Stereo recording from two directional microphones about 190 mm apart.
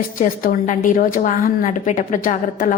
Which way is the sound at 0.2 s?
45° left (ahead or behind).